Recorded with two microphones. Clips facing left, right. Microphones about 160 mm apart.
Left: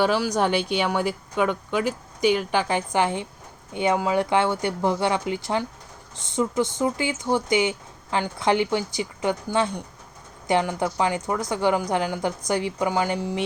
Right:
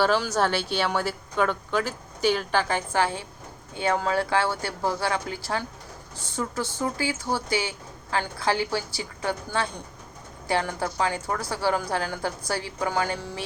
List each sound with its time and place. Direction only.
0.0 s a woman's voice: 15° left (ahead or behind)